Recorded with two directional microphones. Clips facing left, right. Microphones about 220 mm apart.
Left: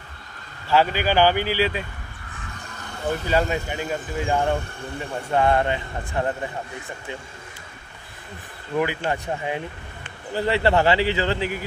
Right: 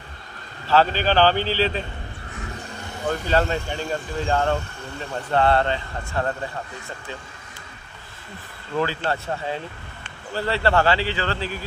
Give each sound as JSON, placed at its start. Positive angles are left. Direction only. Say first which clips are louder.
{"t": 0.7, "sound": "speech", "louder": "right 1 dB", "side_deg": 10}
{"t": 3.3, "sound": "speech", "louder": "right 1 dB", "side_deg": 10}
{"t": 8.7, "sound": "speech", "louder": "left 1 dB", "side_deg": 15}